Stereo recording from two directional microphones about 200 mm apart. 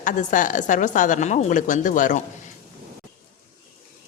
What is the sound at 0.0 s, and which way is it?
A woman's voice, 40° left (ahead or behind).